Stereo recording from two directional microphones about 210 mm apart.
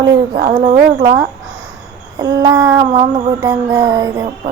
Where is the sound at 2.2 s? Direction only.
15° right (ahead or behind).